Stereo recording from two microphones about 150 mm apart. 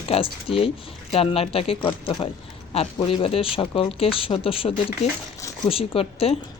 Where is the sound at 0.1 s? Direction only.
40° left (ahead or behind).